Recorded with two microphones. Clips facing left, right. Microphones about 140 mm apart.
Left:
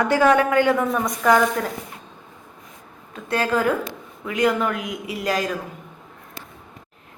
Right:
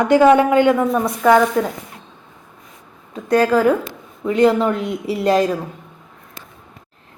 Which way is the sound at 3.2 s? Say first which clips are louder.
Right 8 dB; 40° right (ahead or behind).